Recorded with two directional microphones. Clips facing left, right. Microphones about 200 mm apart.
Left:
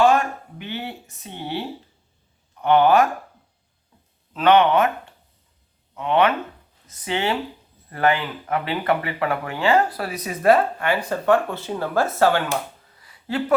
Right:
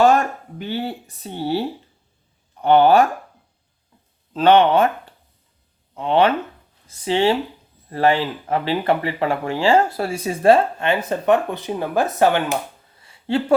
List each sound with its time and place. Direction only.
0.6 s speech: 35° right (ahead or behind)
4.4 s speech: 30° right (ahead or behind)
5.9 s speech: 30° right (ahead or behind)
13.0 s a sound: 25° right (ahead or behind)